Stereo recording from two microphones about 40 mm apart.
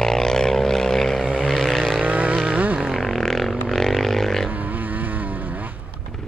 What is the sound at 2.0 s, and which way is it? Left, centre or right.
Vehicle, right.